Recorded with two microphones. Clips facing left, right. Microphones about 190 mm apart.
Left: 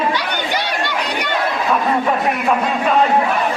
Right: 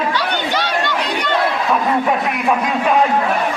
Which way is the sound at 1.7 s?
10° right (ahead or behind).